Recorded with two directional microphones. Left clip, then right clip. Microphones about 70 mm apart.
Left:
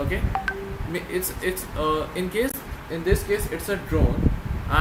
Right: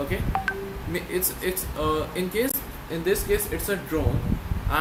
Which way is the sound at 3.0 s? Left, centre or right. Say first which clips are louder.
Even; centre.